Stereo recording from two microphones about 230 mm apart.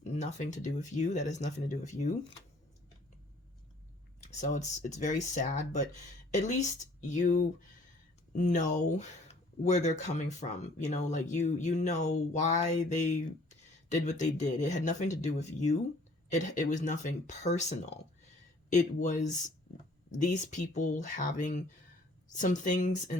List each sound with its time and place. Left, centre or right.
0.0 s speech: left
4.4 s speech: left